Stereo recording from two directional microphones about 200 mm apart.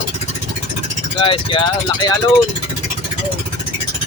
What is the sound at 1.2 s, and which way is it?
Speech, 25° left (ahead or behind).